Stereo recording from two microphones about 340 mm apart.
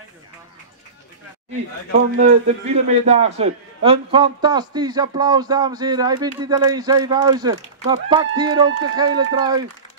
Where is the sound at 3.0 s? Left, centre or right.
Centre.